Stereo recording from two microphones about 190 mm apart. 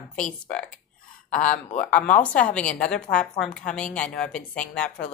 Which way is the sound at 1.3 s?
40° left (ahead or behind).